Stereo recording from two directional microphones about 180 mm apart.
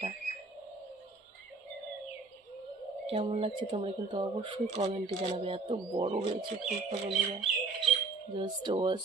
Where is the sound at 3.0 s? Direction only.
35° right (ahead or behind).